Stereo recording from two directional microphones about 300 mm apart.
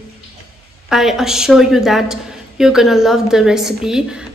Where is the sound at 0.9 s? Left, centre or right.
Centre.